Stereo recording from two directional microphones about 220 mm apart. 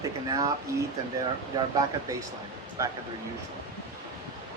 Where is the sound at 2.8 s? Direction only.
15° right (ahead or behind).